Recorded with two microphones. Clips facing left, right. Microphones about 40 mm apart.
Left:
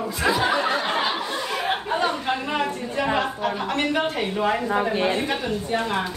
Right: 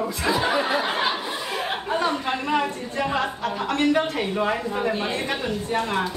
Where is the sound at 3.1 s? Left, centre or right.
Left.